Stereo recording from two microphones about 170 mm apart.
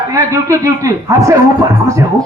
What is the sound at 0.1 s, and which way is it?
A man's voice, 20° right (ahead or behind).